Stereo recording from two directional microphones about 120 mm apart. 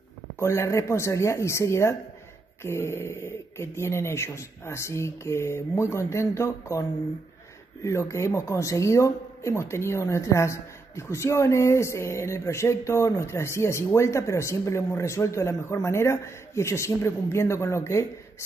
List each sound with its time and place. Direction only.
0.4 s speech: 25° left (ahead or behind)
7.8 s speech: 25° left (ahead or behind)